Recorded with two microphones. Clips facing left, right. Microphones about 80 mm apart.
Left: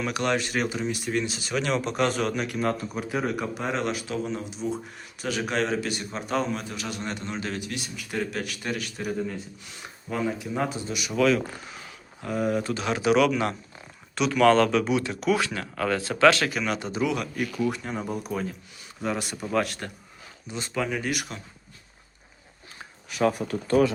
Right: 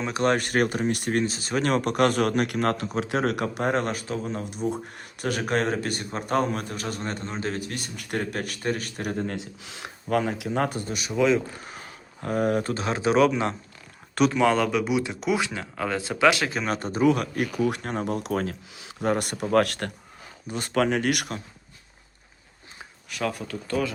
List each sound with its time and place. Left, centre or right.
0.0 s speech: right
0.3 s speech: right
1.2 s speech: right
9.0 s speech: right
10.6 s speech: right
11.6 s a sound: right
12.8 s speech: right
14.4 s speech: centre
16.5 s speech: right
17.7 s speech: right
19.0 s speech: right
23.2 s speech: left